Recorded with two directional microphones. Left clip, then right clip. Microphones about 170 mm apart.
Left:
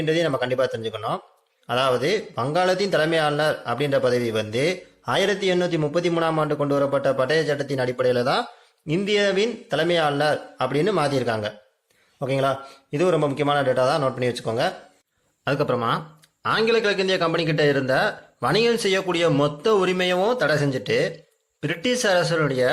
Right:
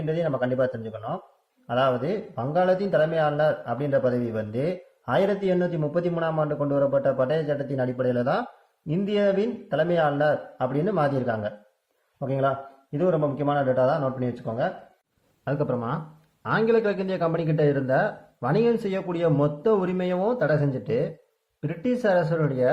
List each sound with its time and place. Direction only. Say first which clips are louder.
0.0 s a man's voice: left 4 dB; 20° left (ahead or behind)